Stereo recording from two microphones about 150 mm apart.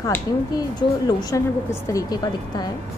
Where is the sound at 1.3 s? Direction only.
20° left (ahead or behind).